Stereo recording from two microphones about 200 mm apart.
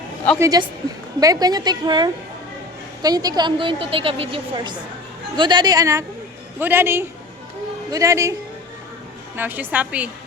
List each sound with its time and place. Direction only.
0.3 s a woman's voice: 15° right (ahead or behind)